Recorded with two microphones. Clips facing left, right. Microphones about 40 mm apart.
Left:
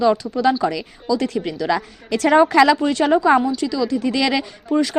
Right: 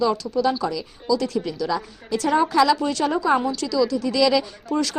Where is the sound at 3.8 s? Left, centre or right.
Left.